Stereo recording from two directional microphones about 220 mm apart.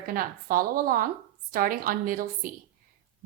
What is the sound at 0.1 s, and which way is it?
A woman's voice, 40° right (ahead or behind).